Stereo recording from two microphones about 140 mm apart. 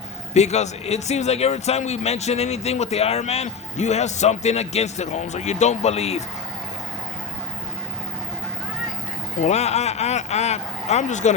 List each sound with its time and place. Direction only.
0.3 s a man's voice: 55° left (ahead or behind)
9.4 s a man's voice: 50° left (ahead or behind)